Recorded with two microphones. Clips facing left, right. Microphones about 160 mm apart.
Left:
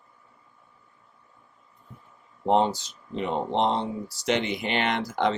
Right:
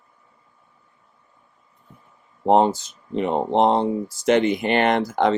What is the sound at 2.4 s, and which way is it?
Speech, 45° right (ahead or behind).